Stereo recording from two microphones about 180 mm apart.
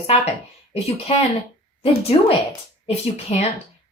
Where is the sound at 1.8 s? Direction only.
35° left (ahead or behind).